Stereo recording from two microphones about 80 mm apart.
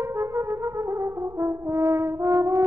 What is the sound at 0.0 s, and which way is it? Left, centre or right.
Brass instrument, right.